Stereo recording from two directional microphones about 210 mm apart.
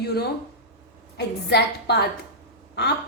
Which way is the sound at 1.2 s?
50° left (ahead or behind).